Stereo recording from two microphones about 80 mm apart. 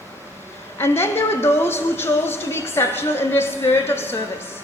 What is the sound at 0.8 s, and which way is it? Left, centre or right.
A woman's voice, left.